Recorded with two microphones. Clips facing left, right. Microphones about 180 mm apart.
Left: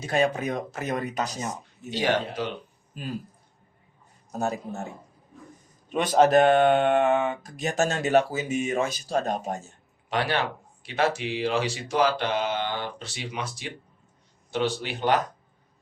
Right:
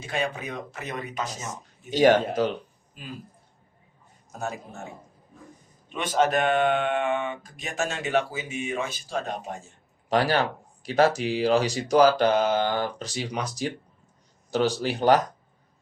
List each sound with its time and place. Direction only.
0.0 s speech: 40° left (ahead or behind)
1.9 s speech: 45° right (ahead or behind)
4.3 s a man's voice: 35° left (ahead or behind)
5.9 s speech: 40° left (ahead or behind)
10.1 s speech: 40° right (ahead or behind)